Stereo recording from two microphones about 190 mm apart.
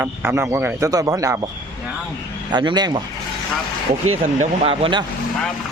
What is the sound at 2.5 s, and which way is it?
Speech, 20° right (ahead or behind).